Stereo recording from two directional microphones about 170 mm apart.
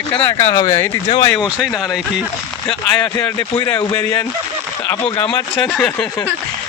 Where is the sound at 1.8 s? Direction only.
Centre (ahead or behind).